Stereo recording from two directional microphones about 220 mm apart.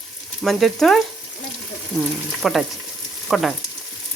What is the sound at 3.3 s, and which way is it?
Frying, centre (ahead or behind).